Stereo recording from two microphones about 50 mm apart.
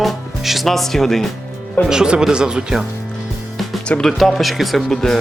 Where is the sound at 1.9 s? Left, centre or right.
Centre.